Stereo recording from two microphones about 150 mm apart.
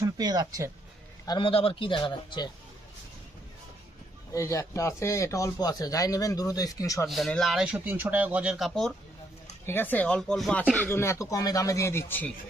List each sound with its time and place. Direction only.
0.0 s speech: 25° right (ahead or behind)
1.2 s a man's voice: 30° left (ahead or behind)
4.3 s a man's voice: 20° left (ahead or behind)
7.1 s speech: centre (ahead or behind)
9.6 s speech: 15° left (ahead or behind)
10.8 s a man's voice: 15° left (ahead or behind)